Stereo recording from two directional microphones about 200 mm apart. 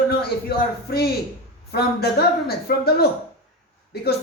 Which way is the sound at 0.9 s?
50° left (ahead or behind).